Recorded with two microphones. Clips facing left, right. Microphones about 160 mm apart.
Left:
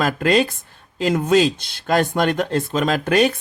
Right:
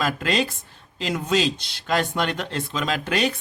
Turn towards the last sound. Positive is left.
turn(degrees=50)  # may be behind; listen again after turning